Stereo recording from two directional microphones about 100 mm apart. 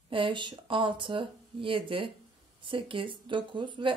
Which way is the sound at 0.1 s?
55° right (ahead or behind).